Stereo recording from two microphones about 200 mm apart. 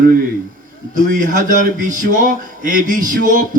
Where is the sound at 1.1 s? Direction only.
40° right (ahead or behind).